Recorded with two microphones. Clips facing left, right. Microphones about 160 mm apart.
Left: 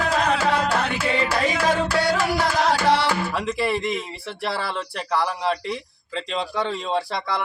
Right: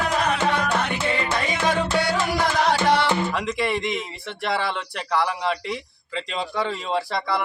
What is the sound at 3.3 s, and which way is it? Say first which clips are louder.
Speech: left 1 dB; centre (ahead or behind).